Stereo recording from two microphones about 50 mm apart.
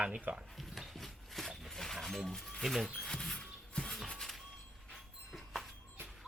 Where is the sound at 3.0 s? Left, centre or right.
Centre.